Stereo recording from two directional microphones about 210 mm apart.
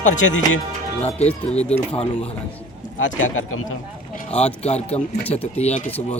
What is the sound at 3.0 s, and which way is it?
Speech, 70° left (ahead or behind).